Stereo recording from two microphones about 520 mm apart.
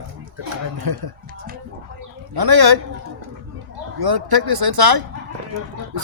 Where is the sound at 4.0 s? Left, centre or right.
Right.